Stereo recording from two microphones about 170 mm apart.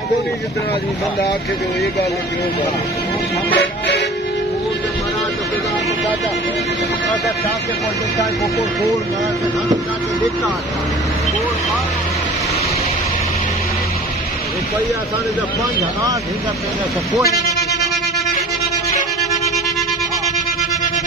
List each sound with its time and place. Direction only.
3.5 s music: 70° left (ahead or behind)